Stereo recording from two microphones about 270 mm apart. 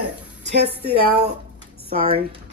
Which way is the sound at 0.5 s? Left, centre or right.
Right.